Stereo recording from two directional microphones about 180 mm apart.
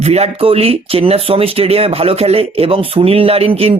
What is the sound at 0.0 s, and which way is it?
Speech, 35° right (ahead or behind).